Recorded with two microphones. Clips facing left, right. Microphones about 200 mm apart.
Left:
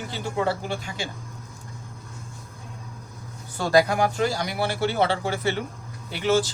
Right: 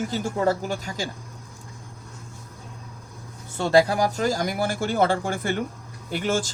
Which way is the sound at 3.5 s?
25° right (ahead or behind).